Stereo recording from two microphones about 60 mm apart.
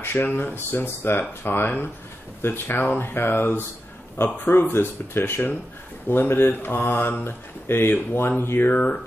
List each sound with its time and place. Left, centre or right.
0.0 s speech: left